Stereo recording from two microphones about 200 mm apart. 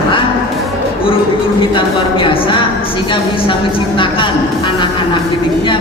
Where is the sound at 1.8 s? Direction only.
25° left (ahead or behind).